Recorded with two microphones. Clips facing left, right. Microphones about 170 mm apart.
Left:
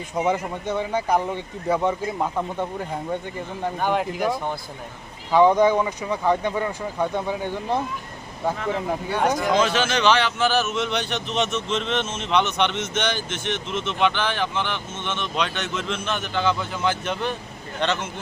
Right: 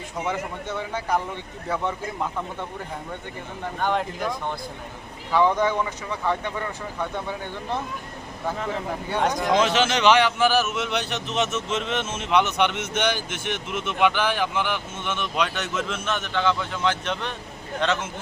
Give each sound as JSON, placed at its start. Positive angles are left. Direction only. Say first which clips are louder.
{"t": 0.3, "sound": "speech", "louder": "left 4 dB", "side_deg": 15}
{"t": 3.8, "sound": "speech", "louder": "left 1 dB", "side_deg": 5}
{"t": 5.3, "sound": "speech", "louder": "left 5 dB", "side_deg": 15}
{"t": 9.2, "sound": "a man's voice", "louder": "left 2 dB", "side_deg": 5}
{"t": 9.5, "sound": "a man's voice", "louder": "even", "side_deg": -20}